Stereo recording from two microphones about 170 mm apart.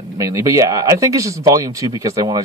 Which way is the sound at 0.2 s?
20° right (ahead or behind).